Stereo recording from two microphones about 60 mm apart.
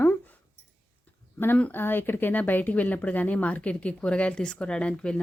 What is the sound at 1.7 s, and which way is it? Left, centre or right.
Speech, left.